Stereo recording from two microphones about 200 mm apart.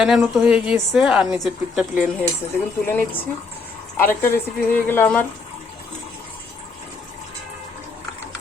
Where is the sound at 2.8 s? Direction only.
10° left (ahead or behind).